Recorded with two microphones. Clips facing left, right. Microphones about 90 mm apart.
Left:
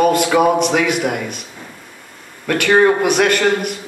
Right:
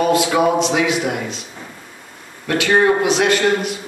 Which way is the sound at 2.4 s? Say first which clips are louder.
Left 2 dB; 55° left (ahead or behind).